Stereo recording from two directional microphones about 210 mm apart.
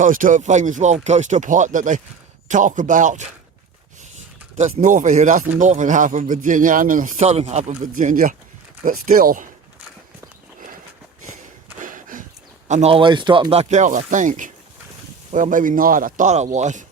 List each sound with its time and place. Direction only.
0.0 s a man's voice: 40° right (ahead or behind)
4.8 s a man's voice: 35° right (ahead or behind)
11.8 s a sound: 40° right (ahead or behind)
12.6 s a man's voice: 30° right (ahead or behind)